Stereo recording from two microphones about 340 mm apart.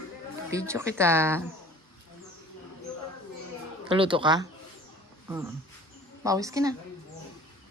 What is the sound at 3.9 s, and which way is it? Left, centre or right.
Speech, centre.